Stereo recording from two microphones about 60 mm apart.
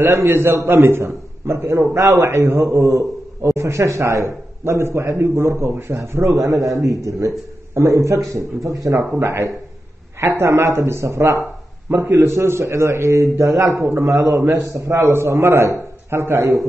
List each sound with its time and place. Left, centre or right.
0.0 s a man's voice: right
9.2 s a man's voice: right